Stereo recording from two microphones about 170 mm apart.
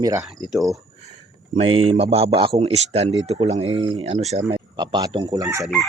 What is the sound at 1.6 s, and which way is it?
Speech, 35° right (ahead or behind).